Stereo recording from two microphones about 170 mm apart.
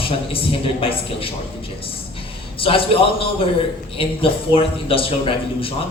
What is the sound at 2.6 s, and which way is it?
Speech, 35° left (ahead or behind).